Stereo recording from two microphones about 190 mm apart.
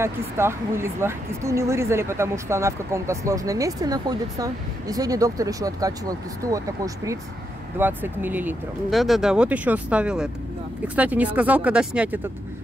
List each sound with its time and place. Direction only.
0.0 s speech: 15° right (ahead or behind)
7.8 s speech: 10° right (ahead or behind)